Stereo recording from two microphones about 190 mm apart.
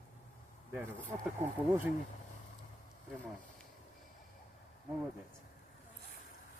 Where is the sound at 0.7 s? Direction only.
15° right (ahead or behind).